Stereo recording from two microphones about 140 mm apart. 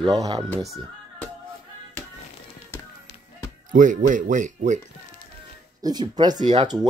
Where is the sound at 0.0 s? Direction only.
30° right (ahead or behind).